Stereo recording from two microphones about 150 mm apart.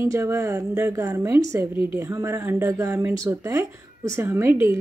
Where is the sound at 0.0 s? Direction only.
20° right (ahead or behind).